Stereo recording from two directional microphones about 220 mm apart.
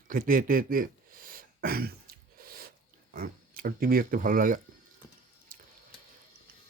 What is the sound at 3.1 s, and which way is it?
Speech, 40° right (ahead or behind).